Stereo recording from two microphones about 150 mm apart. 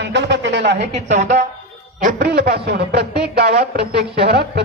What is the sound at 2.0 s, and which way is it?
A man's voice, 90° right.